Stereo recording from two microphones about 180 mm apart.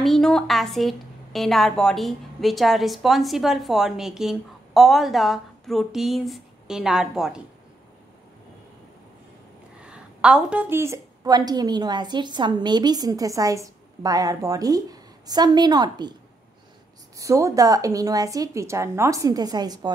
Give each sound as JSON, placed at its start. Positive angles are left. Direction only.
{"t": 0.0, "sound": "a woman's voice", "side_deg": 0}
{"t": 10.2, "sound": "a woman's voice", "side_deg": -5}
{"t": 17.2, "sound": "a woman's voice", "side_deg": -15}